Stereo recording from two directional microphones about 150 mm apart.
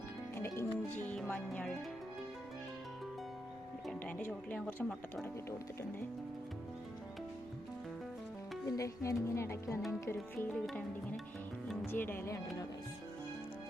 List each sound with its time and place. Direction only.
0.3 s music: 15° left (ahead or behind)
4.0 s speech: 10° left (ahead or behind)
8.6 s speech: 20° left (ahead or behind)